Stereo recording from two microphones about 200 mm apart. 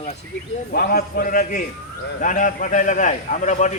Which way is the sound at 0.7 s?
50° left (ahead or behind).